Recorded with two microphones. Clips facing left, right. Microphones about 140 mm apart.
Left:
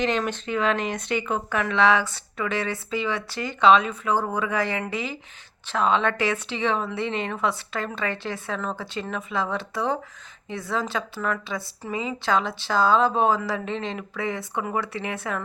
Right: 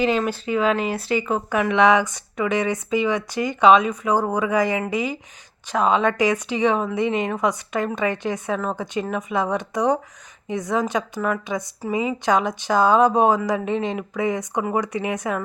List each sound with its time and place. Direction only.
0.0 s speech: 5° right (ahead or behind)